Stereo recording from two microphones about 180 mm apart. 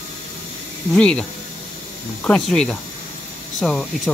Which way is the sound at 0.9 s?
5° left (ahead or behind).